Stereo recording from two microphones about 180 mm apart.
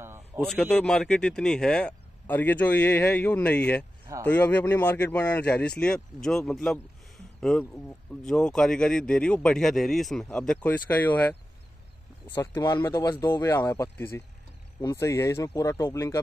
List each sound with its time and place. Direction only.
0.4 s speech: centre (ahead or behind)
12.4 s speech: 15° left (ahead or behind)